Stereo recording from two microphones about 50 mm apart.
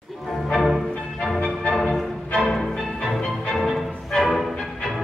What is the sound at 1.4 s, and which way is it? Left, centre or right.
Music, left.